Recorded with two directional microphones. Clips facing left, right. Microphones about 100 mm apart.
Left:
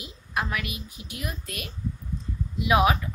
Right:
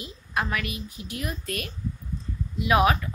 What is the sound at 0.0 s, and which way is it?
A woman's voice, 10° left (ahead or behind).